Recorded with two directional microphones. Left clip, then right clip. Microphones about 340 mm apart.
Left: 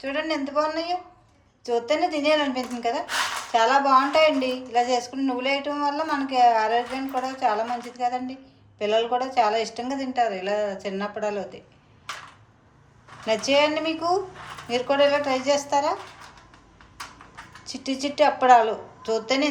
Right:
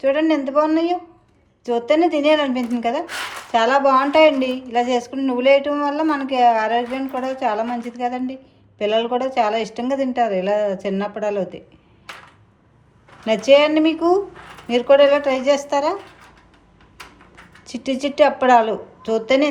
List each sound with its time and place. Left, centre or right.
0.0 s speech: centre
13.2 s speech: right
17.7 s speech: right